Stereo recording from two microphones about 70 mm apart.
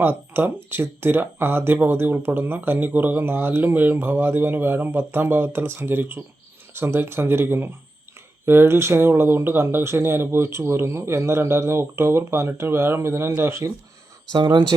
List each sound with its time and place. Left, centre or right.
0.0 s speech: right